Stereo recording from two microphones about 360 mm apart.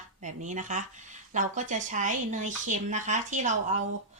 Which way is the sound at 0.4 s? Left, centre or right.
Centre.